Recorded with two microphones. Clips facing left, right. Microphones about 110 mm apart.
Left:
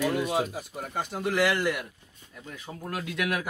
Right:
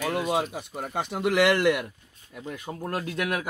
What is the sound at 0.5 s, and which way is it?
Speech, 70° right (ahead or behind).